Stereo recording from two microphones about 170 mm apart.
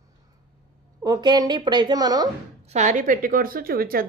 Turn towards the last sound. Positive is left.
turn(degrees=-60)  # may be behind; listen again after turning